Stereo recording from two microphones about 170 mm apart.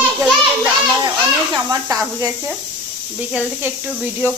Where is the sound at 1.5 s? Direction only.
25° right (ahead or behind).